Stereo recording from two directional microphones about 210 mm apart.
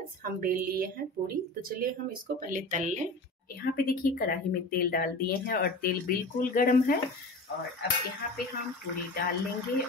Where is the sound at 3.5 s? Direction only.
45° left (ahead or behind).